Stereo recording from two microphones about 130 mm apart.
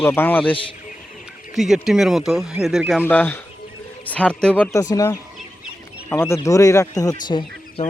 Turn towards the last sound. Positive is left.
turn(degrees=35)  # may be behind; listen again after turning